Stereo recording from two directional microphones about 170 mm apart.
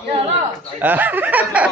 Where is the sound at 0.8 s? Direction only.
10° right (ahead or behind).